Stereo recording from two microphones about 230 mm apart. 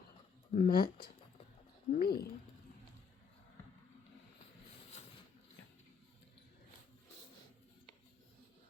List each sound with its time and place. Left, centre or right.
0.5 s speech: left
1.9 s speech: left